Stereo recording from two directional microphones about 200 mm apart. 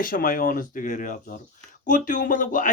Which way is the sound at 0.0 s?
45° left (ahead or behind).